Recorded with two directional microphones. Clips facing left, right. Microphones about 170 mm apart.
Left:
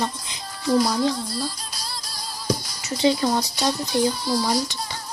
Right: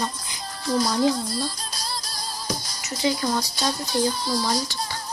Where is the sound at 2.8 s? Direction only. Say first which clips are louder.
Left 4 dB; 30° left (ahead or behind).